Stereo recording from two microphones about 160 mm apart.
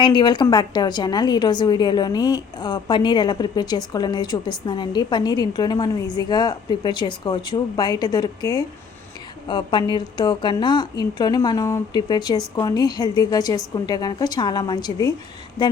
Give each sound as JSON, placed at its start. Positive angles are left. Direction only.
{"t": 0.0, "sound": "a woman's voice", "side_deg": 30}